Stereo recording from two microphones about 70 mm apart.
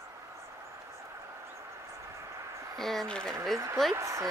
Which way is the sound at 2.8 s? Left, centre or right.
Centre.